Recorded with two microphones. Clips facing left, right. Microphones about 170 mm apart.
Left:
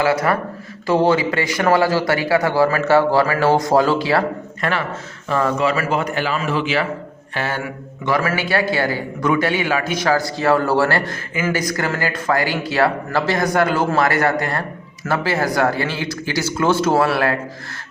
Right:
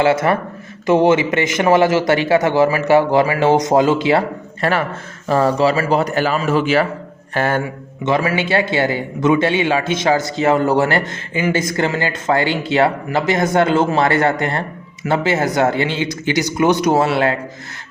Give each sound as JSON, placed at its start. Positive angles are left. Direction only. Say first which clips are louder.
{"t": 0.0, "sound": "a man's voice", "louder": "right 3 dB", "side_deg": -25}
{"t": 4.6, "sound": "speech", "louder": "right 4 dB", "side_deg": -35}
{"t": 8.0, "sound": "a man's voice", "louder": "right 2 dB", "side_deg": -20}